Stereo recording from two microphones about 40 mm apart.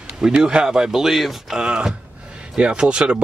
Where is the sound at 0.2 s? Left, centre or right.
Right.